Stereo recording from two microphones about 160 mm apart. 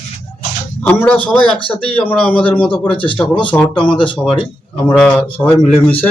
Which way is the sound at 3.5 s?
5° left (ahead or behind).